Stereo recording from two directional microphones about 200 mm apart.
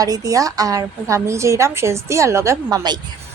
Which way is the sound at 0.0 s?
15° right (ahead or behind).